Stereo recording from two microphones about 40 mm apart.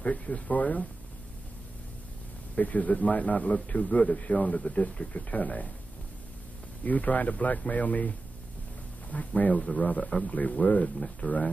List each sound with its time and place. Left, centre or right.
0.0 s a man's voice: left
2.6 s a man's voice: left
6.8 s a man's voice: left
9.1 s a man's voice: left
10.0 s speech: left
10.3 s a man's voice: left